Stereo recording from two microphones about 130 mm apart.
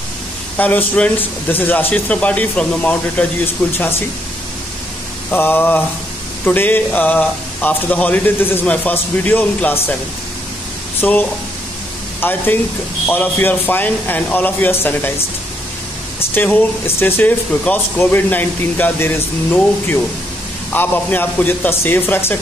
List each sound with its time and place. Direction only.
0.6 s speech: 10° left (ahead or behind)
5.3 s speech: 15° left (ahead or behind)
11.0 s speech: 15° left (ahead or behind)
16.2 s speech: 15° left (ahead or behind)